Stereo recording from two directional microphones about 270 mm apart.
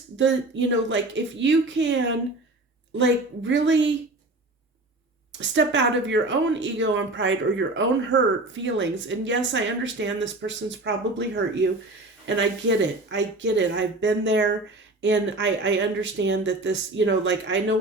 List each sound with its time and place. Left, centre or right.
0.2 s speech: right
5.4 s speech: right